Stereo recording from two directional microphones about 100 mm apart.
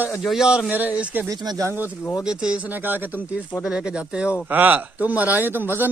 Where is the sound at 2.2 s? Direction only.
5° right (ahead or behind).